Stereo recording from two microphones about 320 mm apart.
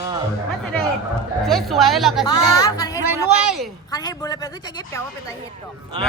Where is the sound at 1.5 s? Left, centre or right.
Centre.